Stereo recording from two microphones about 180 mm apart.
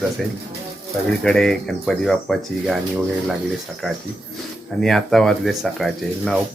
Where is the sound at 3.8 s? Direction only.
Centre (ahead or behind).